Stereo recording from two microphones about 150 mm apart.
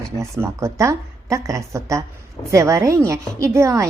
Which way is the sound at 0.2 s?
20° right (ahead or behind).